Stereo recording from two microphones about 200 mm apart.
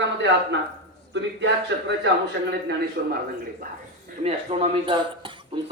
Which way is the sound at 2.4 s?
45° right (ahead or behind).